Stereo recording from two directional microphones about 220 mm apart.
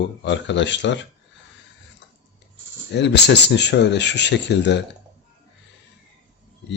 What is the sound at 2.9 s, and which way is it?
Speech, 50° left (ahead or behind).